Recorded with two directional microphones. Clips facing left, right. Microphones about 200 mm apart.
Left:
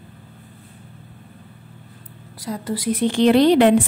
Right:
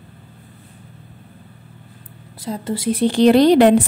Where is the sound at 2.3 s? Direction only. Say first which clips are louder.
Right 2 dB; 25° right (ahead or behind); by 3.8 s 40° right (ahead or behind).